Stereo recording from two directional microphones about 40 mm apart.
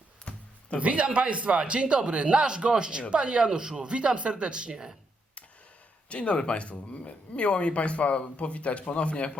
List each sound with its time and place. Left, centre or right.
0.3 s a sound: left
0.8 s speech: right; by 4.9 s centre
6.1 s speech: left